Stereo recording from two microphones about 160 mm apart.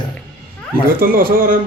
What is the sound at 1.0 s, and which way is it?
Speech, 65° right (ahead or behind).